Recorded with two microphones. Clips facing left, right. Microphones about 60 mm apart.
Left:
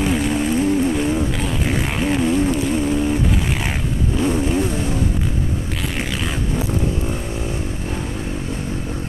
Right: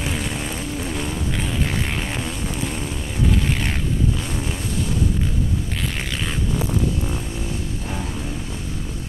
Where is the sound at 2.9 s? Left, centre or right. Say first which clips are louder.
Left 12 dB; left.